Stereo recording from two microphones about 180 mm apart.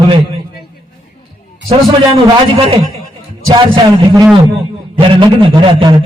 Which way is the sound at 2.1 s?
30° right (ahead or behind).